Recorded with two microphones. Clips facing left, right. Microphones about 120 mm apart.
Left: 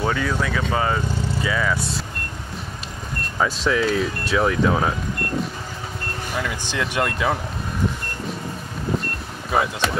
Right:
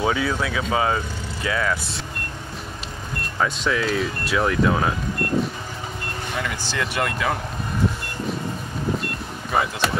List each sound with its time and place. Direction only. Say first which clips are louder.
0.0 s speech: even; 5° right (ahead or behind)
3.3 s speech: left 2 dB; centre (ahead or behind)
6.3 s speech: left 1 dB; 5° left (ahead or behind)
9.5 s speech: left 1 dB; centre (ahead or behind)